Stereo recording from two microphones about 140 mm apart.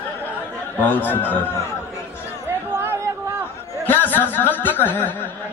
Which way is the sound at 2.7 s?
15° right (ahead or behind).